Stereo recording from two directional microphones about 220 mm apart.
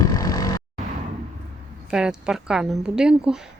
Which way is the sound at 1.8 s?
5° right (ahead or behind).